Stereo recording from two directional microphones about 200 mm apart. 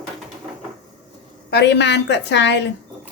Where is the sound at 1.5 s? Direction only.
60° left (ahead or behind).